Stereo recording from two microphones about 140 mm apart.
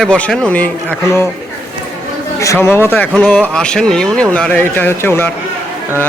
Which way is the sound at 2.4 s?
20° left (ahead or behind).